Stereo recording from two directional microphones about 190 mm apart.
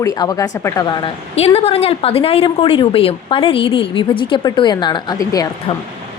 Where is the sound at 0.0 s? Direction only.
20° left (ahead or behind).